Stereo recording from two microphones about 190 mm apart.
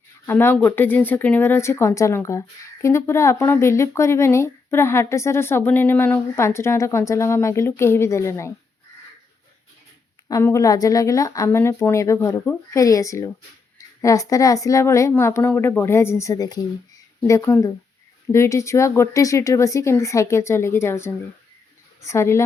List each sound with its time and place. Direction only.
0.3 s speech: 10° left (ahead or behind)
10.2 s speech: 15° left (ahead or behind)